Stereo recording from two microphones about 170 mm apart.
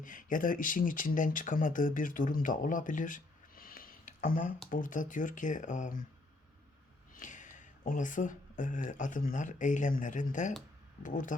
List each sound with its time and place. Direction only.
0.0 s speech: 50° left (ahead or behind)
7.1 s speech: 50° left (ahead or behind)